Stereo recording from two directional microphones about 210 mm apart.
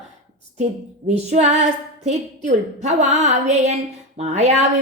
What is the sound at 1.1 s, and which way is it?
A woman's voice, 30° right (ahead or behind).